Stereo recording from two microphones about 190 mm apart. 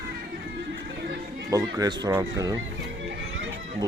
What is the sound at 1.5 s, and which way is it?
Speech, 20° right (ahead or behind).